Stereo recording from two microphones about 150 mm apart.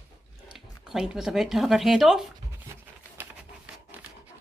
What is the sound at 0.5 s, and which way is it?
Speech, 5° right (ahead or behind).